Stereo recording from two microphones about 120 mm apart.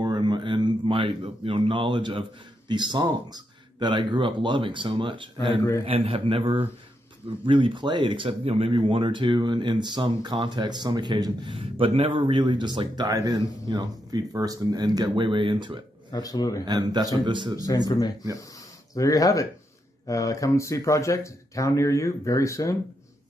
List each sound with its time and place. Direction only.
0.0 s a sound: 40° right (ahead or behind)
2.7 s a man's voice: 40° right (ahead or behind)
11.5 s a man's voice: 50° right (ahead or behind)
12.2 s speech: 40° right (ahead or behind)
16.1 s speech: 30° left (ahead or behind)
16.6 s speech: 35° right (ahead or behind)
17.8 s speech: 30° left (ahead or behind)